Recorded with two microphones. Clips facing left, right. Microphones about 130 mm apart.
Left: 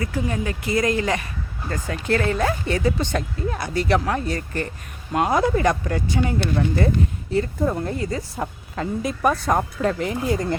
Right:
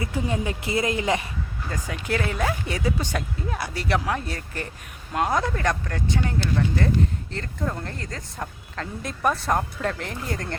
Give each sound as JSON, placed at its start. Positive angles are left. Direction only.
{"t": 0.0, "sound": "speech", "side_deg": -20}
{"t": 1.7, "sound": "speech", "side_deg": -5}